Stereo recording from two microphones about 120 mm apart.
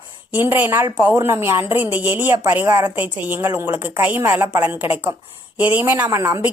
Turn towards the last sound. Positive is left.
turn(degrees=-20)  # may be behind; listen again after turning